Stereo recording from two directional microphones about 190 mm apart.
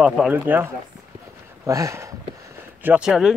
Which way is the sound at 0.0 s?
10° right (ahead or behind).